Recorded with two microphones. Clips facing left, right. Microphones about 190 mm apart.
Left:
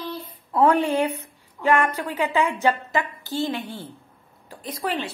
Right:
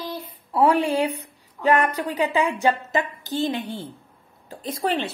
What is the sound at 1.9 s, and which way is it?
A woman's voice, 15° right (ahead or behind).